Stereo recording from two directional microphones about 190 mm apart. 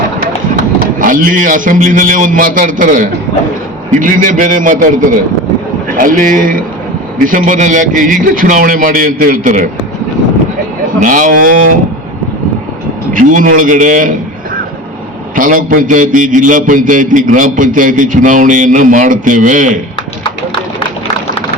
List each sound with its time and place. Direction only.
0.9 s a man's voice: 45° right (ahead or behind)
11.0 s a man's voice: 45° right (ahead or behind)
13.1 s a man's voice: 45° right (ahead or behind)
15.4 s a man's voice: 45° right (ahead or behind)